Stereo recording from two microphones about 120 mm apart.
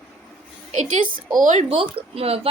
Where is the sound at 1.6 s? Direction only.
55° right (ahead or behind).